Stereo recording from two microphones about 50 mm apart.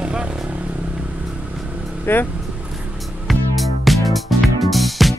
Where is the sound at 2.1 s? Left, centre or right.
Left.